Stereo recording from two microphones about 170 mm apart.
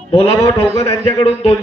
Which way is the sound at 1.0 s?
35° left (ahead or behind).